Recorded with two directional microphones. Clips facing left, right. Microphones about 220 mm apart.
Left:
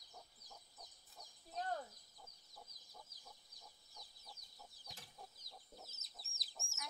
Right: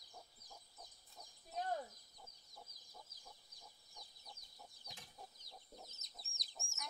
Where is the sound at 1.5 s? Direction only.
15° right (ahead or behind).